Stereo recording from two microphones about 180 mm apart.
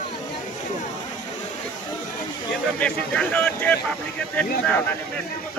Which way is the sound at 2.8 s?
5° left (ahead or behind).